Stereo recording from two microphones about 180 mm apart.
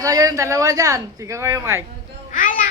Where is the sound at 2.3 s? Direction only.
45° left (ahead or behind).